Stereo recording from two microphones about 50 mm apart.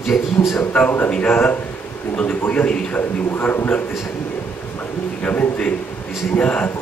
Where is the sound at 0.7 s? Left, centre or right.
Left.